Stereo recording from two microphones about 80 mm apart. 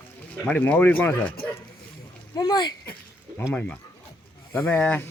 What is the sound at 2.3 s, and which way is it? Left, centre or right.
Speech, left.